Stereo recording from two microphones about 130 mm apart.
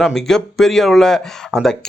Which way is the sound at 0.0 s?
5° left (ahead or behind).